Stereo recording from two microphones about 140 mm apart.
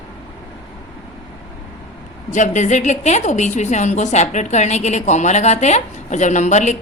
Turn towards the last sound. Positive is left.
turn(degrees=55)  # may be behind; listen again after turning